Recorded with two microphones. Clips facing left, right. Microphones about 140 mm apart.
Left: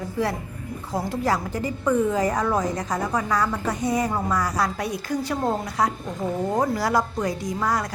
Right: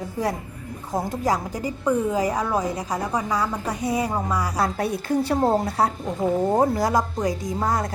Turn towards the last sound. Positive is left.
turn(degrees=-25)  # may be behind; listen again after turning